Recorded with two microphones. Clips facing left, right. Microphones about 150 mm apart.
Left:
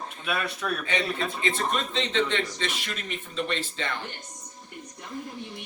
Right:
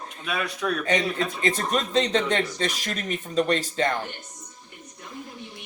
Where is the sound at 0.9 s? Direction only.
45° right (ahead or behind).